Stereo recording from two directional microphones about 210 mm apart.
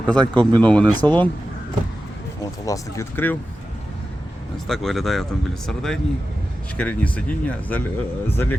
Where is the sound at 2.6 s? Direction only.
15° left (ahead or behind).